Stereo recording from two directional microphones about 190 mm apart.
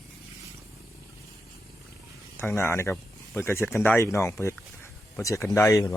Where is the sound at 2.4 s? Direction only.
10° left (ahead or behind).